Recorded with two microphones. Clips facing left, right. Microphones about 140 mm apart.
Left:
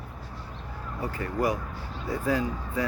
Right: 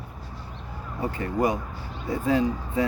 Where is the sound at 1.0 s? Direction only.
25° right (ahead or behind).